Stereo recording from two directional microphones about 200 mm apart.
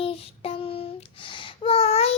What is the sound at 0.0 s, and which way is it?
Child singing, 30° left (ahead or behind).